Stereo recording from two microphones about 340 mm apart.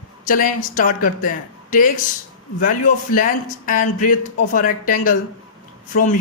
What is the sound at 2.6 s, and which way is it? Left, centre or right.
Speech, left.